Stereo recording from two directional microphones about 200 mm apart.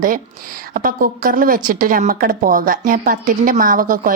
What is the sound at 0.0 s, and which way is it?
A woman's voice, 45° right (ahead or behind).